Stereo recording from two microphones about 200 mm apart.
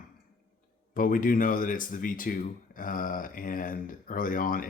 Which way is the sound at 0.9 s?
45° left (ahead or behind).